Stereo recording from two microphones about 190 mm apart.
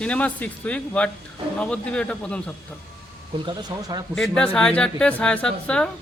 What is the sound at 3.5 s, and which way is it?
Speech, 20° right (ahead or behind).